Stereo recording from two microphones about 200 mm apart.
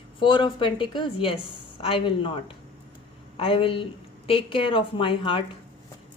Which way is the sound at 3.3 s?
25° left (ahead or behind).